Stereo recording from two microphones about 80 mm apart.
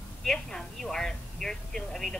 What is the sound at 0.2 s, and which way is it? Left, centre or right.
A woman's voice, centre.